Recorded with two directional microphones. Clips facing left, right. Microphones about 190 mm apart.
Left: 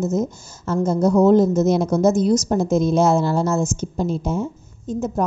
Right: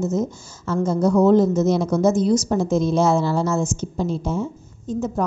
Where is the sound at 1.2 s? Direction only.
45° left (ahead or behind).